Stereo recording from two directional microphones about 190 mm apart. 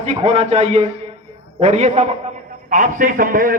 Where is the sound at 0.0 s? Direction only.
35° right (ahead or behind).